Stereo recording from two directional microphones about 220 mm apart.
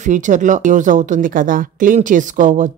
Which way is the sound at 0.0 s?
35° right (ahead or behind).